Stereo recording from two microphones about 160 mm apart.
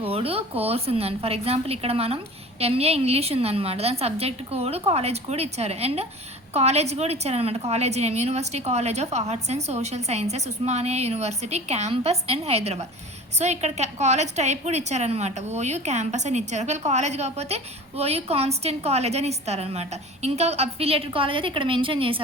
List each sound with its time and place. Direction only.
0.1 s a woman's voice: 35° right (ahead or behind)